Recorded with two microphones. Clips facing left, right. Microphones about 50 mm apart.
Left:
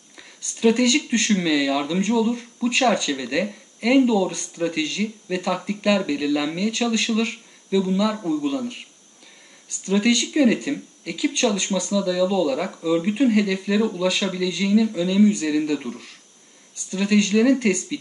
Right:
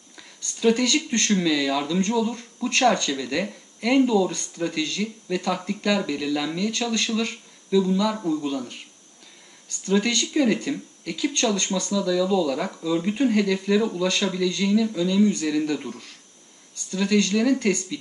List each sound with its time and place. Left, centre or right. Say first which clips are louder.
0.6 s speech: left 2 dB; centre
9.8 s speech: left 3 dB; centre
12.8 s speech: left 3 dB; centre
16.9 s speech: left 2 dB; centre